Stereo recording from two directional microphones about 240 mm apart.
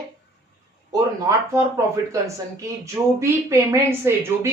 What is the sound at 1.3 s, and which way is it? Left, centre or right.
A woman's voice, centre.